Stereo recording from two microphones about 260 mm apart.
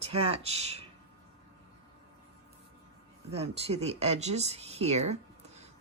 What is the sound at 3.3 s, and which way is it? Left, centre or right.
Speech, right.